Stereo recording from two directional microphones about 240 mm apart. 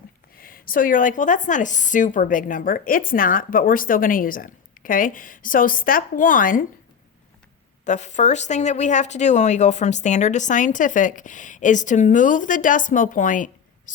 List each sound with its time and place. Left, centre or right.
0.3 s a woman's voice: left
7.9 s a woman's voice: left